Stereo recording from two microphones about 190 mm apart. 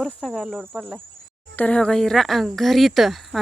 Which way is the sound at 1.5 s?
5° left (ahead or behind).